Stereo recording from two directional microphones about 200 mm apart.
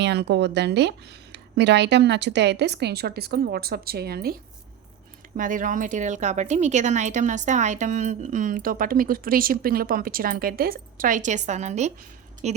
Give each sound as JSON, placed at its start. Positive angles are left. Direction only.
{"t": 0.0, "sound": "speech", "side_deg": -55}
{"t": 5.4, "sound": "a woman's voice", "side_deg": -40}